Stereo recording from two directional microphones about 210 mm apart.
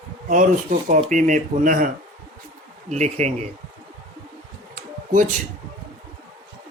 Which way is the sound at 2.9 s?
35° right (ahead or behind).